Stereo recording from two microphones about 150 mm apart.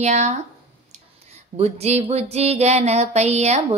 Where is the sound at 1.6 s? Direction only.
45° right (ahead or behind).